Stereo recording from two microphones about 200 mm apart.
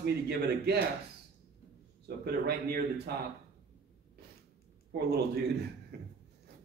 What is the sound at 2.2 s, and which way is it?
Speech, 50° right (ahead or behind).